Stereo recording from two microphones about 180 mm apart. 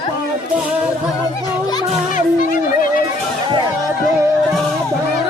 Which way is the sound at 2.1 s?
50° left (ahead or behind).